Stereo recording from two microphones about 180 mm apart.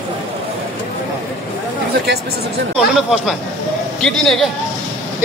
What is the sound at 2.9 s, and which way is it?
Speech, centre (ahead or behind).